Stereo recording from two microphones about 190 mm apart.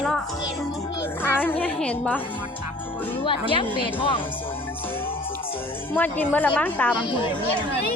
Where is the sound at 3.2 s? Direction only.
25° left (ahead or behind).